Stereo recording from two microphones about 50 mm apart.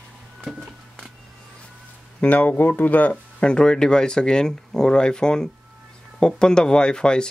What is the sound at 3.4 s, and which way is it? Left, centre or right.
Speech, centre.